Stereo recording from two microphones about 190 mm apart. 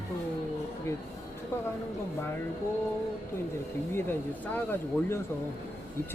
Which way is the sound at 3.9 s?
10° left (ahead or behind).